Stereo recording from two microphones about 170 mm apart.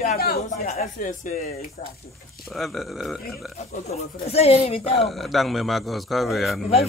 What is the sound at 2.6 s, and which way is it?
Speech, centre (ahead or behind).